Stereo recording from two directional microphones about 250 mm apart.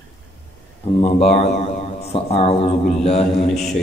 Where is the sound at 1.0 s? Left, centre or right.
Left.